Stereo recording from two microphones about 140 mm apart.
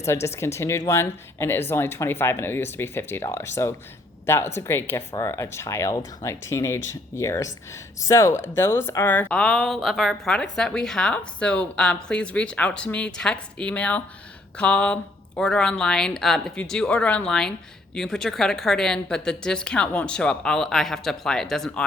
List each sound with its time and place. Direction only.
0.0 s a woman's voice: 20° left (ahead or behind)
9.3 s a woman's voice: 5° left (ahead or behind)